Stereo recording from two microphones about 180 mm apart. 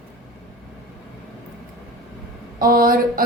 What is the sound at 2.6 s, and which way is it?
Speech, 55° right (ahead or behind).